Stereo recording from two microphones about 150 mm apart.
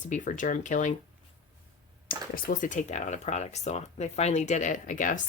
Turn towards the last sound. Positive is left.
turn(degrees=60)  # may be behind; listen again after turning